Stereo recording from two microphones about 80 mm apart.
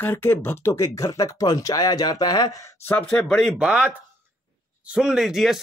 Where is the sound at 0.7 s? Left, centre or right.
Left.